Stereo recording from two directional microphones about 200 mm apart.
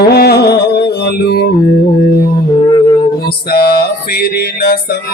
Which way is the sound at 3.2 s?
50° left (ahead or behind).